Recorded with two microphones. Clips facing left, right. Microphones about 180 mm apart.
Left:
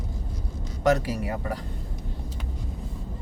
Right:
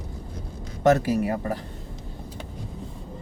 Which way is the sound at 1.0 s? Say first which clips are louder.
Right 6 dB; 25° right (ahead or behind).